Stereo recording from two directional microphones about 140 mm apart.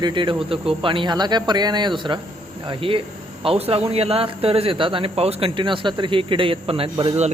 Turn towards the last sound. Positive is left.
turn(degrees=-45)  # may be behind; listen again after turning